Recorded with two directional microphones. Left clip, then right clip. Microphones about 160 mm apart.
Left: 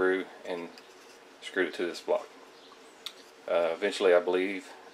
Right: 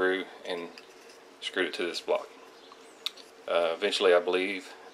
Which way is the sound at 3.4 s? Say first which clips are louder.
Right 1 dB; 30° right (ahead or behind).